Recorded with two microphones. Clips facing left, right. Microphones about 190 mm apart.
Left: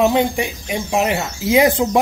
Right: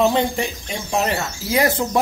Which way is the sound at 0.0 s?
10° left (ahead or behind).